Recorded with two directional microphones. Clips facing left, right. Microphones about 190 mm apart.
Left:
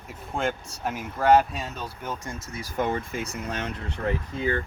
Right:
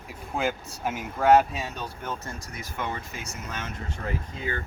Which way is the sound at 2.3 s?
30° left (ahead or behind).